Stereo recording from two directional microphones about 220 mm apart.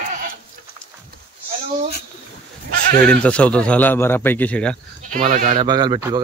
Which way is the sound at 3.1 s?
5° left (ahead or behind).